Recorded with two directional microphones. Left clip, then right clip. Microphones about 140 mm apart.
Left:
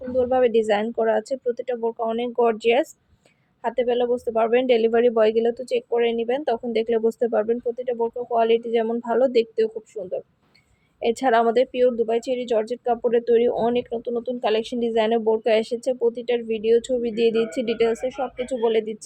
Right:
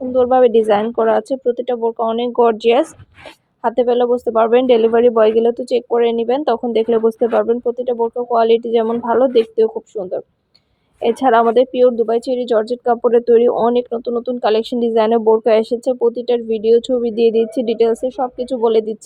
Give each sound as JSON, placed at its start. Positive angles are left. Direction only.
{"t": 0.2, "sound": "speech", "side_deg": -30}
{"t": 1.5, "sound": "a woman's voice", "side_deg": -35}
{"t": 3.6, "sound": "a woman's voice", "side_deg": -35}
{"t": 6.8, "sound": "speech", "side_deg": -15}
{"t": 7.5, "sound": "speech", "side_deg": -35}
{"t": 9.9, "sound": "a woman's voice", "side_deg": -35}
{"t": 11.0, "sound": "a woman's voice", "side_deg": -20}